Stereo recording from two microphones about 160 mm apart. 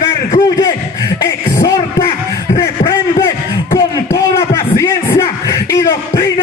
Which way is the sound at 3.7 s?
20° left (ahead or behind).